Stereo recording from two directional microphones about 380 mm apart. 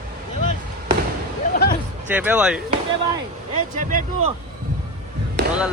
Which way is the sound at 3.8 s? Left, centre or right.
Right.